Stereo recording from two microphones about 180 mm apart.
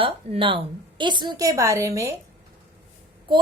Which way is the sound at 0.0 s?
30° right (ahead or behind).